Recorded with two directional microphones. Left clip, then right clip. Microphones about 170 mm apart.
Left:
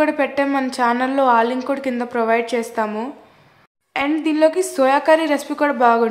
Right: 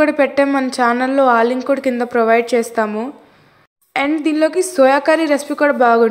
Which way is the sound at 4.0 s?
15° right (ahead or behind).